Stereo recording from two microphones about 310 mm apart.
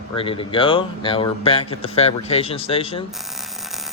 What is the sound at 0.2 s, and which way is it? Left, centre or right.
Speech, centre.